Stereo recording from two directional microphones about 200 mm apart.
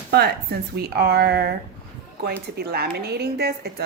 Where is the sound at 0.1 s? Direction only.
55° right (ahead or behind).